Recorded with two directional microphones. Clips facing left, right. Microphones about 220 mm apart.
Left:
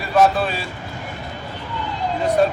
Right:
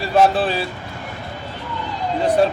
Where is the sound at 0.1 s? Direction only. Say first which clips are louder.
Even; 30° right (ahead or behind).